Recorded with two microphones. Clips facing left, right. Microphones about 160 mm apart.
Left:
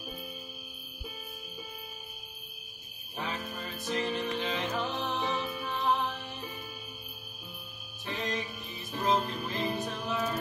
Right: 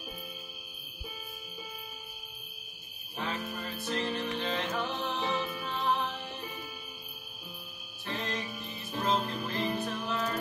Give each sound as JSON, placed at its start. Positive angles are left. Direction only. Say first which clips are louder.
{"t": 3.2, "sound": "music", "louder": "right 1 dB", "side_deg": 15}
{"t": 8.0, "sound": "music", "louder": "left 1 dB", "side_deg": 15}